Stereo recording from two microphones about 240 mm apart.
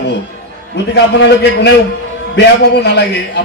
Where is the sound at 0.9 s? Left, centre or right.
Left.